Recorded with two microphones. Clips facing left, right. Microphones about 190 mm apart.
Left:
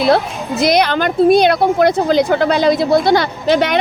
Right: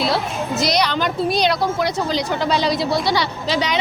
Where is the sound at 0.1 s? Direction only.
55° left (ahead or behind).